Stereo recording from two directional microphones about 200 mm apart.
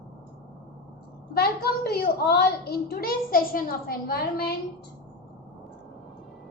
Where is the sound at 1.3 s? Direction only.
50° left (ahead or behind).